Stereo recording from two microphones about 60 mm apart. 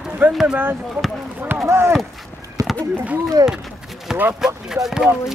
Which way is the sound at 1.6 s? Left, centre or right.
Right.